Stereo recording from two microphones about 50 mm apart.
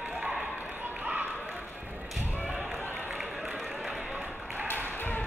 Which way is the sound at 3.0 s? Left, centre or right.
Centre.